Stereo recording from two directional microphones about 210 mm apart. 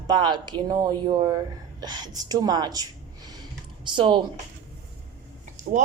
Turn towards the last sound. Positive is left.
turn(degrees=-40)  # may be behind; listen again after turning